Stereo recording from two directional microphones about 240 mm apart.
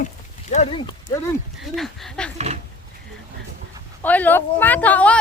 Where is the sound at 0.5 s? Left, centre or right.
Left.